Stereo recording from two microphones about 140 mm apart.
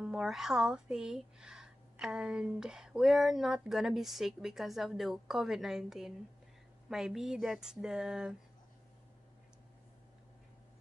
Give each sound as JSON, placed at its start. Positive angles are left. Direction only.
{"t": 0.0, "sound": "speech", "side_deg": -5}